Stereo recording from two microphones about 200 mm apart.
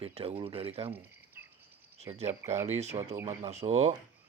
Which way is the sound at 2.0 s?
30° right (ahead or behind).